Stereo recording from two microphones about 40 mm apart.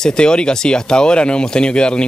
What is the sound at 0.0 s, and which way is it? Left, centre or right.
Speech, left.